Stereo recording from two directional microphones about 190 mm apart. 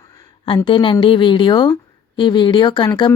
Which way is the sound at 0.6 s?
25° left (ahead or behind).